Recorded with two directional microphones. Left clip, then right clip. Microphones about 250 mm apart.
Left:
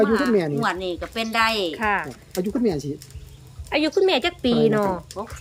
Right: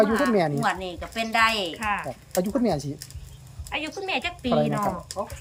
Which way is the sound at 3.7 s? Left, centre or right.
Centre.